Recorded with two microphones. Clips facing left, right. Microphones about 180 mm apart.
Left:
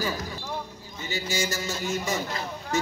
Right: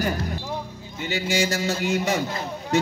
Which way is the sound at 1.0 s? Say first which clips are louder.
Right 6 dB; 70° right (ahead or behind).